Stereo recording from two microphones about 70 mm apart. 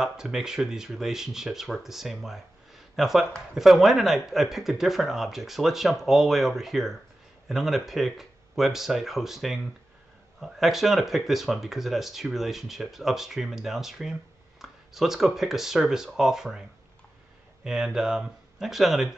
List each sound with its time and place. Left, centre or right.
0.0 s speech: centre
17.6 s speech: centre